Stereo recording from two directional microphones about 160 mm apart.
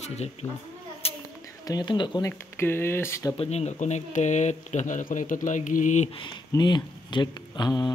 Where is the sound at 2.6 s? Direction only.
15° left (ahead or behind).